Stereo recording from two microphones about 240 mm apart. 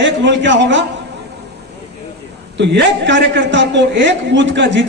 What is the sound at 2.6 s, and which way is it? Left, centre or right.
A man's voice, right.